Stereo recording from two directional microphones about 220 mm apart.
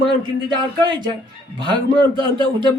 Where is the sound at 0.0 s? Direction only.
20° right (ahead or behind).